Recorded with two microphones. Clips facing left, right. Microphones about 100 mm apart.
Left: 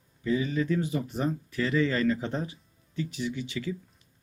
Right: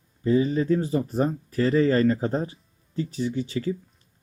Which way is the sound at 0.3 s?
35° right (ahead or behind).